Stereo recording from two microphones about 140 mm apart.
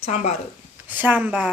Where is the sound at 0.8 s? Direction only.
10° right (ahead or behind).